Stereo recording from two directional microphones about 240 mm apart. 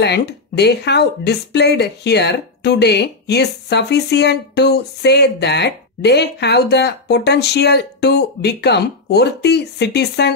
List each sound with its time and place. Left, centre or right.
0.0 s speech: left